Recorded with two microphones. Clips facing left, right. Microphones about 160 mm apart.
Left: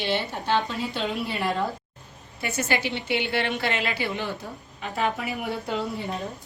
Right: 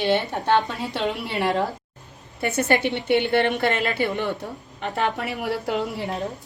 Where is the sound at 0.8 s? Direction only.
75° right (ahead or behind).